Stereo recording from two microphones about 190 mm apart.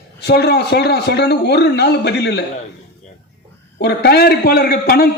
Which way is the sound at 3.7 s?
55° left (ahead or behind).